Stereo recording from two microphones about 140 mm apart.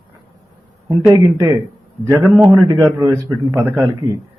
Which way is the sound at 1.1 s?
20° right (ahead or behind).